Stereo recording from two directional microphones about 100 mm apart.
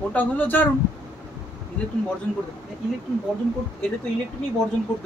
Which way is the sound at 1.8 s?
15° left (ahead or behind).